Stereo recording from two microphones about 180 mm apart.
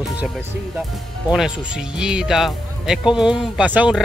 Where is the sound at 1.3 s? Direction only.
5° right (ahead or behind).